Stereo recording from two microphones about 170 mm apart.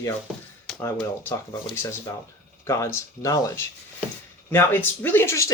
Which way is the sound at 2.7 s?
15° left (ahead or behind).